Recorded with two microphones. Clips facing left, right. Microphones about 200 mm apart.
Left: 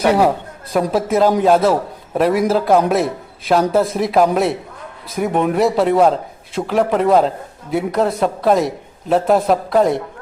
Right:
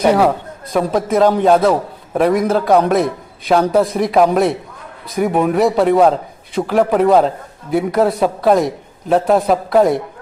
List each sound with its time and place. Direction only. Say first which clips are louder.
0.0 s a man's voice: right 1 dB; 5° left (ahead or behind)